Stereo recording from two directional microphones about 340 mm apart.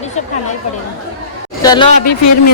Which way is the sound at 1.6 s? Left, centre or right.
Centre.